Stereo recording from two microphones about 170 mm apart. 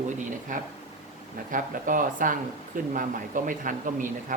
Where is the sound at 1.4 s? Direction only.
50° right (ahead or behind).